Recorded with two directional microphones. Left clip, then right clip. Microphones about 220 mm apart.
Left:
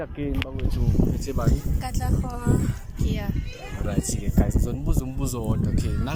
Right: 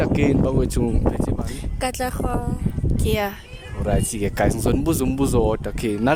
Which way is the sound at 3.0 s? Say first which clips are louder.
Right 9 dB; 50° right (ahead or behind).